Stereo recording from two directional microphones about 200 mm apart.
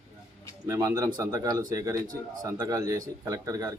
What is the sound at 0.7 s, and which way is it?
Speech, 15° right (ahead or behind).